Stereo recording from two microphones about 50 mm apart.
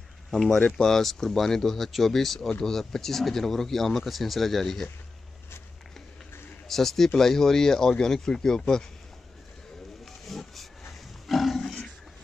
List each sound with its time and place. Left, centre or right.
0.3 s speech: centre
6.7 s speech: centre
10.2 s a sound: centre
11.2 s roaring cats: centre
11.6 s roaring cats: centre